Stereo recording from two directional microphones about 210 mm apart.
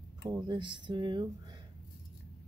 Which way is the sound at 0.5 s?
20° right (ahead or behind).